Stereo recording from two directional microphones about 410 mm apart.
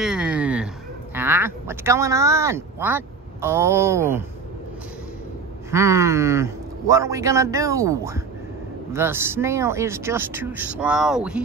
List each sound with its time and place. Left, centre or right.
0.0 s a sound: centre
1.1 s speech: centre
5.7 s speech: centre